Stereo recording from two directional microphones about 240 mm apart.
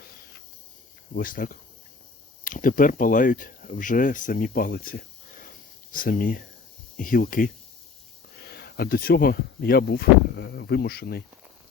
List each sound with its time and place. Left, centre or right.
1.1 s speech: left